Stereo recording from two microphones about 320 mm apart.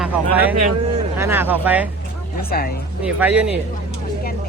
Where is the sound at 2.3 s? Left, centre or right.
Left.